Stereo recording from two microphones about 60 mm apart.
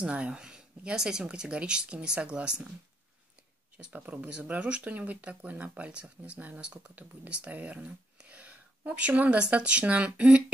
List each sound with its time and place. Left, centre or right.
0.0 s speech: centre
3.7 s speech: right